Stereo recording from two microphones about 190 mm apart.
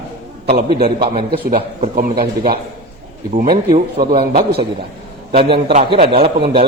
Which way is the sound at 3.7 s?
30° right (ahead or behind).